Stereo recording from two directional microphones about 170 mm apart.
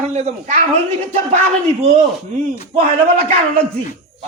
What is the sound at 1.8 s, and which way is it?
Speech, 40° right (ahead or behind).